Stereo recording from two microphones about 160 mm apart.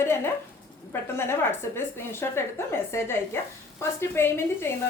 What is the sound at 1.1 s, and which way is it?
A woman's voice, 15° left (ahead or behind).